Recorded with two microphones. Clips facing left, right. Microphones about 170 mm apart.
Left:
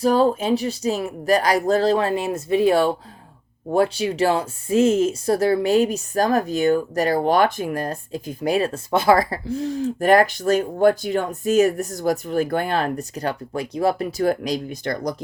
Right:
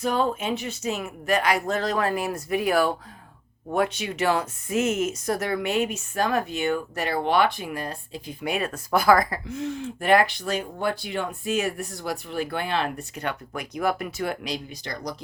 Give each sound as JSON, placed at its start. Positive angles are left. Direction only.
{"t": 0.0, "sound": "speech", "side_deg": 35}